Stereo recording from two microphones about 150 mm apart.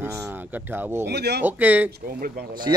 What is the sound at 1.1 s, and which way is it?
Speech, 90° right.